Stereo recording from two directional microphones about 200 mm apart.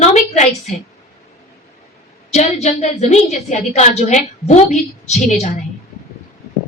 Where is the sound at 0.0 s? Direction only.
35° left (ahead or behind).